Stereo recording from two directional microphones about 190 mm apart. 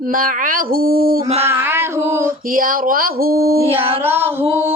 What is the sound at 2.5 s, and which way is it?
Speech, 45° right (ahead or behind).